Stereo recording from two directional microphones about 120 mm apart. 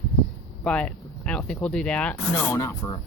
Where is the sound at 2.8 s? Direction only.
30° left (ahead or behind).